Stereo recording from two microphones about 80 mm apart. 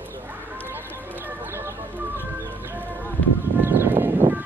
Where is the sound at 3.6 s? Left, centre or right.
Right.